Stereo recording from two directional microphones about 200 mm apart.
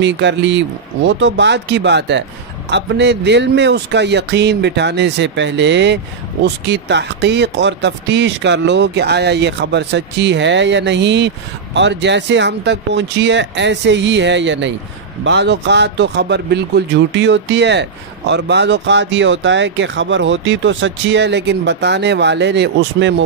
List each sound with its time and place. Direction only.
0.0 s speech: 60° right (ahead or behind)